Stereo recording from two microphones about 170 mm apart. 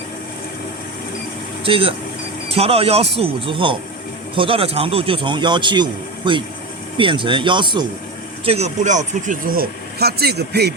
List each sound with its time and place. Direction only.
1.6 s speech: 35° right (ahead or behind)
8.4 s speech: 40° right (ahead or behind); by 10.8 s 75° right (ahead or behind)